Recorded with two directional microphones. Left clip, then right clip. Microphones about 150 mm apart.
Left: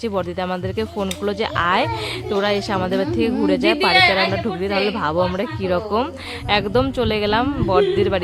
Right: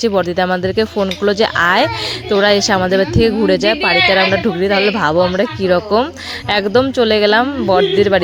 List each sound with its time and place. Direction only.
0.0 s speech: 40° right (ahead or behind)